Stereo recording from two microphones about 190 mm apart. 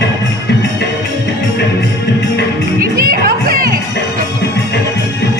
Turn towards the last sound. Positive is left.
turn(degrees=-50)  # may be behind; listen again after turning